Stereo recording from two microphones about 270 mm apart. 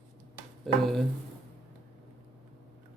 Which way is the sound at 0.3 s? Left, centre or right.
Centre.